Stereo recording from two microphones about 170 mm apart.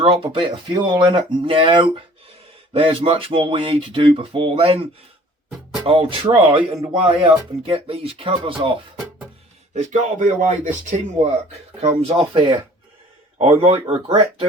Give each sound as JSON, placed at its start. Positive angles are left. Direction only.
{"t": 0.0, "sound": "speech", "side_deg": -30}
{"t": 9.7, "sound": "speech", "side_deg": -45}
{"t": 12.0, "sound": "speech", "side_deg": -30}